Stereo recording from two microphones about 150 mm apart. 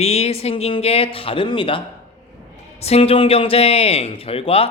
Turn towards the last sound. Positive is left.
turn(degrees=40)  # may be behind; listen again after turning